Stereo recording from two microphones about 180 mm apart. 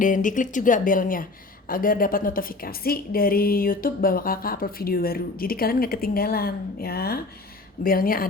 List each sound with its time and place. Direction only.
0.0 s speech: 45° left (ahead or behind)